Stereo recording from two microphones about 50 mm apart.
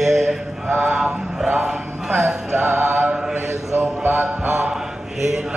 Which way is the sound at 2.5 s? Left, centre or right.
Right.